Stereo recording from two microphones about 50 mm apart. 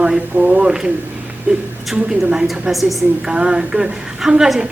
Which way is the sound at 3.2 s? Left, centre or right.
Centre.